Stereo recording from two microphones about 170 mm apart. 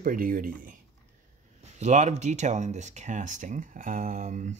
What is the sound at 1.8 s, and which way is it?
Speech, 40° right (ahead or behind).